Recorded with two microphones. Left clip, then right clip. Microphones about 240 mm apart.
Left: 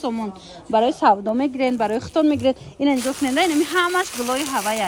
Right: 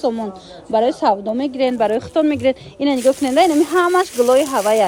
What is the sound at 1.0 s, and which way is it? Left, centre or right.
A woman's voice, centre.